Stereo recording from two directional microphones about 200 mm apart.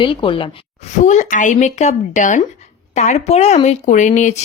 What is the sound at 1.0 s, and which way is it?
Speech, 35° left (ahead or behind).